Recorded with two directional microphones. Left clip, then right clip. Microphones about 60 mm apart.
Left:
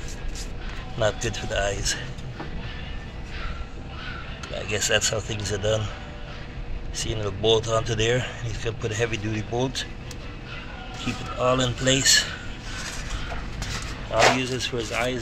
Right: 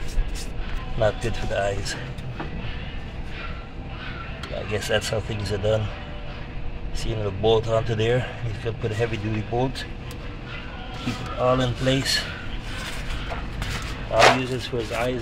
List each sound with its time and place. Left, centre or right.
0.9 s speech: centre
4.6 s speech: centre
7.0 s speech: centre
11.1 s speech: centre
14.1 s a sound: centre
14.4 s speech: centre